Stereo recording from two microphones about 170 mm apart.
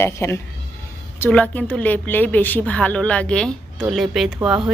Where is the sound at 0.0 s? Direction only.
15° left (ahead or behind).